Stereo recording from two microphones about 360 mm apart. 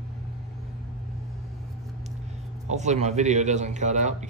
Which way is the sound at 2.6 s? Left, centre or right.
Centre.